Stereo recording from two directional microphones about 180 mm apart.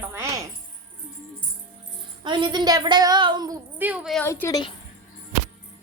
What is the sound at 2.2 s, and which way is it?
A woman's voice, 25° right (ahead or behind).